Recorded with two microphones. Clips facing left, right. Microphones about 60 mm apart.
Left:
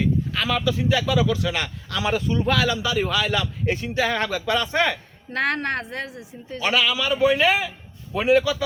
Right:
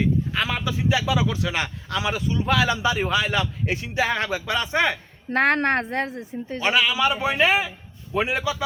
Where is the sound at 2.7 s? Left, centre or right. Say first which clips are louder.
Right 1 dB; right.